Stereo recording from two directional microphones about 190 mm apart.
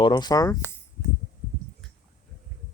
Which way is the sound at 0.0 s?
25° left (ahead or behind).